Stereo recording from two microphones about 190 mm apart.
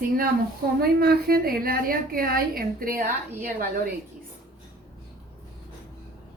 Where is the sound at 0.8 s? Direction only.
55° right (ahead or behind).